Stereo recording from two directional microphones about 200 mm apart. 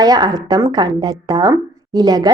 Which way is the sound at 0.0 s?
20° right (ahead or behind).